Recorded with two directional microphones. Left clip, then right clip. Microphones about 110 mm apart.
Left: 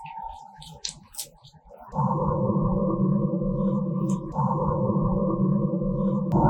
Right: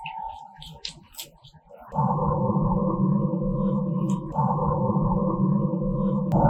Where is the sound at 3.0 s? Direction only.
45° right (ahead or behind).